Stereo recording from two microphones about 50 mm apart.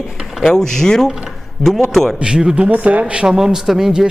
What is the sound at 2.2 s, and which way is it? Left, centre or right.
Speech, centre.